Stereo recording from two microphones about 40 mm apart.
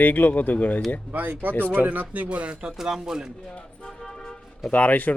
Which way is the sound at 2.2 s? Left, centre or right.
Right.